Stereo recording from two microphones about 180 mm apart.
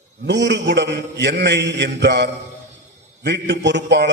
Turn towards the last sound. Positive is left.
turn(degrees=-75)  # may be behind; listen again after turning